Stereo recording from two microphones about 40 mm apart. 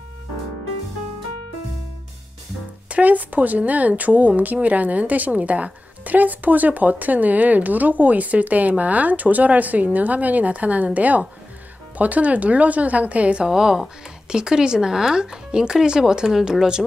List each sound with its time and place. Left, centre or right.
2.9 s speech: right
13.5 s speech: centre